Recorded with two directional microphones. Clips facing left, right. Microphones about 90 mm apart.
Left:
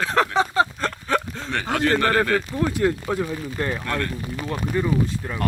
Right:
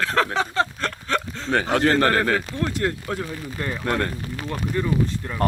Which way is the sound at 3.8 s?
30° right (ahead or behind).